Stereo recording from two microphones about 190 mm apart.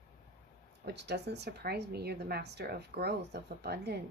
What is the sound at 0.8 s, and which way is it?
Speech, 65° right (ahead or behind).